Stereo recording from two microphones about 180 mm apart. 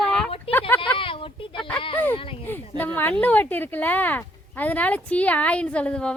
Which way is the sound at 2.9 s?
10° left (ahead or behind).